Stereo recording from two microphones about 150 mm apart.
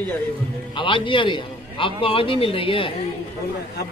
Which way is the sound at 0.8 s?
35° left (ahead or behind).